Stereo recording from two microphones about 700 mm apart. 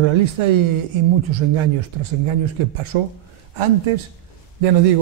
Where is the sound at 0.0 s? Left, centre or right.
Right.